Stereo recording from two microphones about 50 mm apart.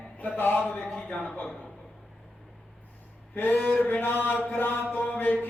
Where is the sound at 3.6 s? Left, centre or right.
Left.